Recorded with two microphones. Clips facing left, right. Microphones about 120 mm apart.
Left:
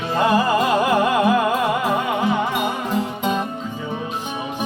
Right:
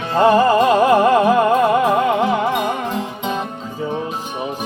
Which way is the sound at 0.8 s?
30° right (ahead or behind).